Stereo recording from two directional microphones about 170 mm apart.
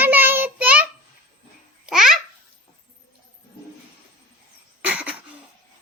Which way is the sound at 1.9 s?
Centre (ahead or behind).